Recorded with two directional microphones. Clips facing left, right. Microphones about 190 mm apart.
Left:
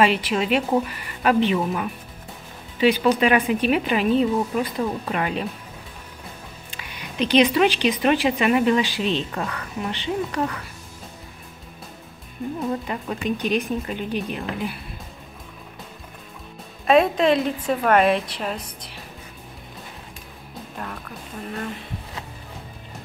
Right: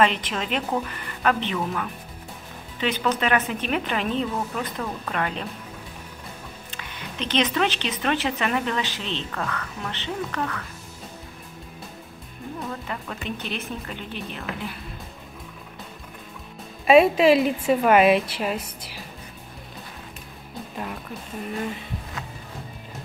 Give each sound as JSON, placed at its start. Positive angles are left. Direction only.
{"t": 0.0, "sound": "speech", "side_deg": 10}
{"t": 6.7, "sound": "speech", "side_deg": 10}
{"t": 12.4, "sound": "speech", "side_deg": 15}
{"t": 16.8, "sound": "a woman's voice", "side_deg": -5}
{"t": 20.7, "sound": "music", "side_deg": -10}